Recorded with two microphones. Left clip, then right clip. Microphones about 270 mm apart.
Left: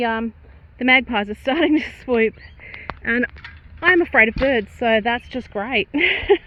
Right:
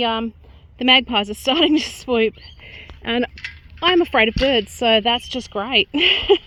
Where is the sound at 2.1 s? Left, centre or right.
Right.